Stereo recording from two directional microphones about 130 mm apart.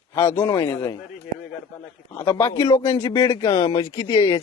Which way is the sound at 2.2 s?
25° left (ahead or behind).